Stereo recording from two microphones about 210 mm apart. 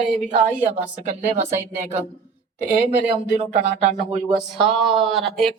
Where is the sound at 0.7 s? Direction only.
30° right (ahead or behind).